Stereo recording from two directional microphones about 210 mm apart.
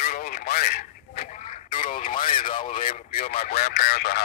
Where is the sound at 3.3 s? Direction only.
30° left (ahead or behind).